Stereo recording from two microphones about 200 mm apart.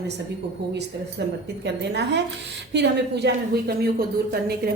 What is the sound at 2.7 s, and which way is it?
Speech, 60° right (ahead or behind).